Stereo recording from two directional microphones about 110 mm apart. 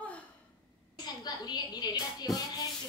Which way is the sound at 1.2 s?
40° left (ahead or behind).